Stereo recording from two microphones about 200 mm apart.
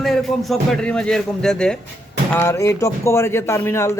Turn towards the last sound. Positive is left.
turn(degrees=15)  # may be behind; listen again after turning